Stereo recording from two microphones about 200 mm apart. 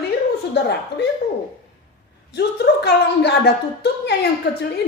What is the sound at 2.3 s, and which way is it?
A woman's voice, 55° left (ahead or behind).